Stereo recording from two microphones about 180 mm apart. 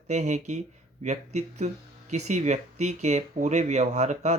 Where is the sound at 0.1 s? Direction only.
40° right (ahead or behind).